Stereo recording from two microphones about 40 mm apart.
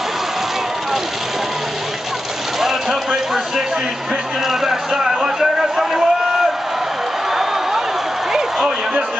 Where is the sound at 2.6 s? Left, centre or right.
Centre.